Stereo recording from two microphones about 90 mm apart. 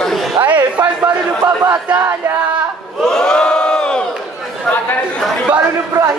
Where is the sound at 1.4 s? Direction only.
40° right (ahead or behind).